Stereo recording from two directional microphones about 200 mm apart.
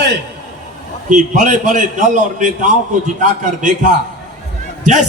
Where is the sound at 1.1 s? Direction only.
40° right (ahead or behind).